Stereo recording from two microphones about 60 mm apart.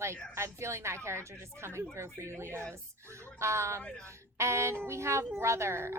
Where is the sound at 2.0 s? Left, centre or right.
Right.